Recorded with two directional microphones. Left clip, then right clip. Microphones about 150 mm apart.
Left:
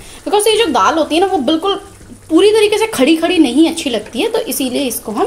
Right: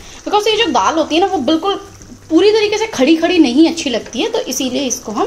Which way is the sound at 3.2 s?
Centre (ahead or behind).